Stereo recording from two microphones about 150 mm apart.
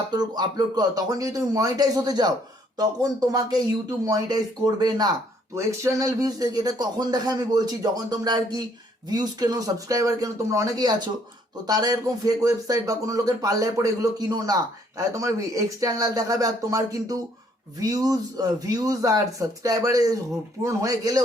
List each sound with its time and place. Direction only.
0.1 s speech: 30° right (ahead or behind)